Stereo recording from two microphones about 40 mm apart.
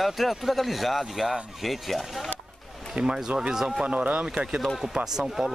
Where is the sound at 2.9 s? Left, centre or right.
Right.